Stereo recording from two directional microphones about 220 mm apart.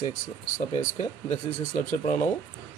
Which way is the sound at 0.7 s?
25° left (ahead or behind).